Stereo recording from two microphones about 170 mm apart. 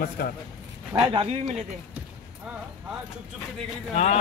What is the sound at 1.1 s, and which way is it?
Speech, 35° right (ahead or behind).